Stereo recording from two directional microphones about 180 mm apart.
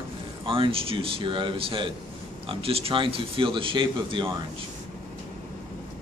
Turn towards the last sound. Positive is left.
turn(degrees=-30)  # may be behind; listen again after turning